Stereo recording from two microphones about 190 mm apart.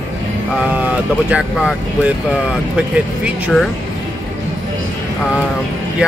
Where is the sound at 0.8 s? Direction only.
5° right (ahead or behind).